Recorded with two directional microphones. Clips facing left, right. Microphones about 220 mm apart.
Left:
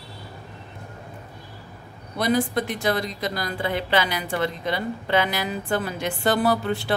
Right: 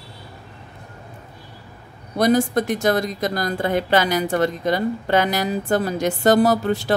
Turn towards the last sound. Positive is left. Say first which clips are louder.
# right 4 dB
turn(degrees=-40)  # may be behind; listen again after turning